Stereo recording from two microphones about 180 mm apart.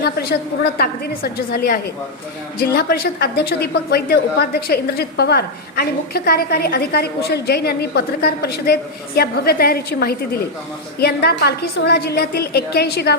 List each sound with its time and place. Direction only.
0.0 s a woman's voice: 60° left (ahead or behind)